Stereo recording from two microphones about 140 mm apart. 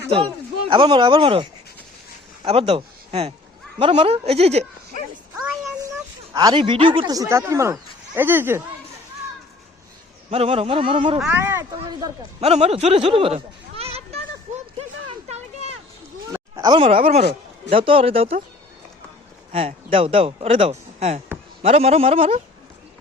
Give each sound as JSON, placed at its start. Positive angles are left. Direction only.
{"t": 0.7, "sound": "a man's voice", "side_deg": -35}
{"t": 5.4, "sound": "child singing", "side_deg": -10}
{"t": 5.8, "sound": "speech", "side_deg": -25}
{"t": 10.2, "sound": "a man's voice", "side_deg": -45}
{"t": 11.2, "sound": "speech", "side_deg": -10}
{"t": 12.4, "sound": "speech", "side_deg": -50}
{"t": 16.3, "sound": "a sound", "side_deg": -30}
{"t": 17.1, "sound": "speech", "side_deg": -55}
{"t": 17.7, "sound": "speech", "side_deg": -40}
{"t": 19.5, "sound": "speech", "side_deg": -40}